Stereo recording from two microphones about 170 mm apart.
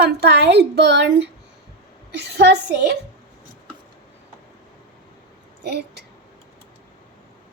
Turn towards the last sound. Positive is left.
turn(degrees=-80)